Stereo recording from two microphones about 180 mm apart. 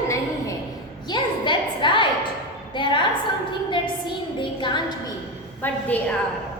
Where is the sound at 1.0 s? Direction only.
25° left (ahead or behind).